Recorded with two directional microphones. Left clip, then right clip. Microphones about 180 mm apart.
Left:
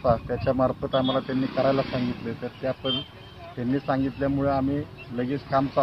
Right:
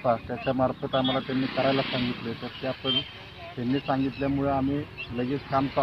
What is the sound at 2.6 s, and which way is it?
Speech, 15° left (ahead or behind).